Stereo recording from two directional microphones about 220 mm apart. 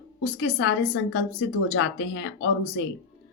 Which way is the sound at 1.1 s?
60° left (ahead or behind).